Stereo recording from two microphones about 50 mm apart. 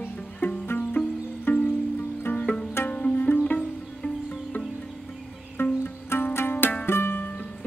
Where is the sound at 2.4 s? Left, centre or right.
Centre.